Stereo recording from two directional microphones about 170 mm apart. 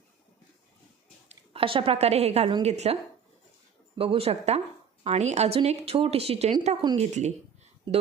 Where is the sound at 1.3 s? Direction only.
35° right (ahead or behind).